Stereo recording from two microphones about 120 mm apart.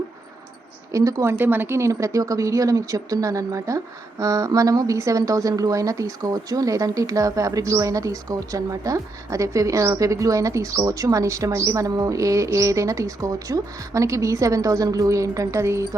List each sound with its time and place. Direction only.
0.9 s a woman's voice: 25° right (ahead or behind)